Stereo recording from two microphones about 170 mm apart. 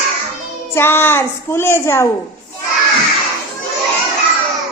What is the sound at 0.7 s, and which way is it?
A child's voice, 15° left (ahead or behind).